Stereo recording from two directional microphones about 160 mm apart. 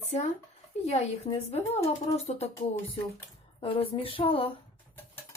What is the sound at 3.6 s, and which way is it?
Speech, 35° left (ahead or behind).